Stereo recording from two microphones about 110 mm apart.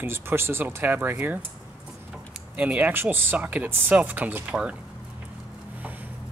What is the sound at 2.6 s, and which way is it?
Speech, 10° right (ahead or behind).